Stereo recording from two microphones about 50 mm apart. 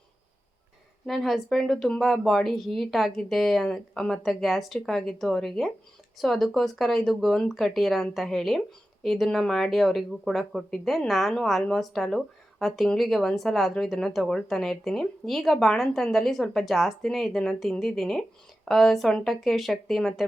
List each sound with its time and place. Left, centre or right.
1.0 s a woman's voice: centre